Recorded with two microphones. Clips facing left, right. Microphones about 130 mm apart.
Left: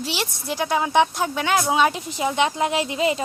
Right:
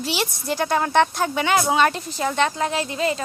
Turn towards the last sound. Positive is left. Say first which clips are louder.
# left 2 dB
turn(degrees=20)  # may be behind; listen again after turning